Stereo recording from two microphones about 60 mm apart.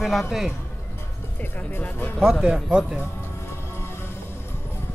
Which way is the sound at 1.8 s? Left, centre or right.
Left.